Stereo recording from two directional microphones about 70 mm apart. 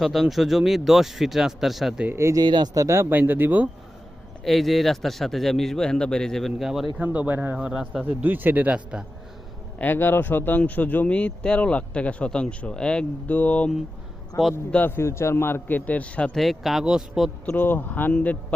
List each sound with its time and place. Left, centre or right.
0.0 s a man's voice: centre
2.1 s speech: right
2.4 s speech: right
2.7 s speech: right
3.1 s a man's voice: right
4.4 s a man's voice: centre
6.6 s a man's voice: centre
7.0 s a man's voice: right
7.5 s speech: centre
8.0 s a man's voice: right
9.7 s a man's voice: left
14.8 s a man's voice: left; by 16.3 s centre
16.3 s a man's voice: centre
17.6 s speech: left